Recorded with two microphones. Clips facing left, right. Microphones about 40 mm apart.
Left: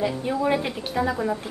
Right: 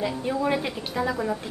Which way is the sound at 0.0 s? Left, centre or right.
Centre.